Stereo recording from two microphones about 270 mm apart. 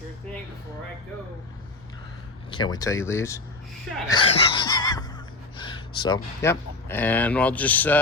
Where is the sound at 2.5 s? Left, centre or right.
Centre.